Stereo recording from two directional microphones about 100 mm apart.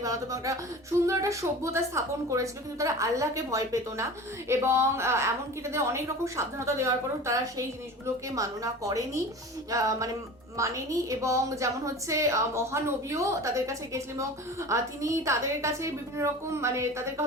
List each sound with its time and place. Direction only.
0.0 s a woman's voice: 35° right (ahead or behind)
8.4 s a woman's voice: 35° right (ahead or behind)